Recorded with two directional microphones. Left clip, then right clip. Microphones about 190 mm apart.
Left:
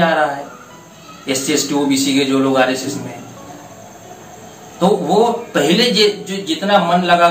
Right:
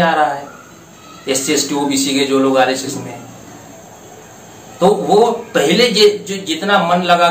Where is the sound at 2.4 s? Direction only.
10° right (ahead or behind).